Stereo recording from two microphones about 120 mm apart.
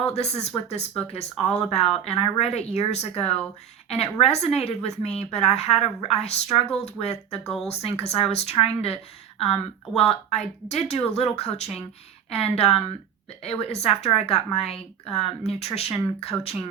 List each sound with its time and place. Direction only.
0.0 s speech: 65° left (ahead or behind)
7.4 s speech: 5° left (ahead or behind)
7.7 s speech: 60° left (ahead or behind)
10.0 s speech: 60° left (ahead or behind)